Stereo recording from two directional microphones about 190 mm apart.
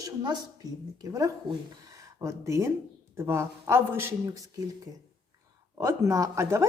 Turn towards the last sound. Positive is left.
turn(degrees=-15)  # may be behind; listen again after turning